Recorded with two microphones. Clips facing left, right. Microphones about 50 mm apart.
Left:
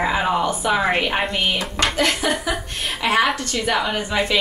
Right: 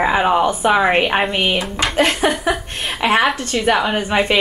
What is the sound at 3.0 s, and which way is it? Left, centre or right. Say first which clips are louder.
Speech: right 3 dB; centre.